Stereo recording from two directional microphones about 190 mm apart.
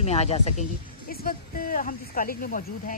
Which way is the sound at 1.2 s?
50° left (ahead or behind).